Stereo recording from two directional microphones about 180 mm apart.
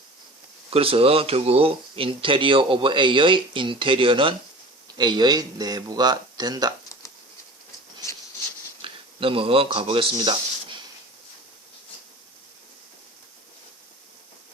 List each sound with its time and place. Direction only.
0.7 s speech: 30° right (ahead or behind)
8.8 s speech: 30° right (ahead or behind)